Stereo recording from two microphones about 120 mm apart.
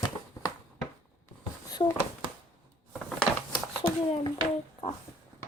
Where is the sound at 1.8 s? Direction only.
45° left (ahead or behind).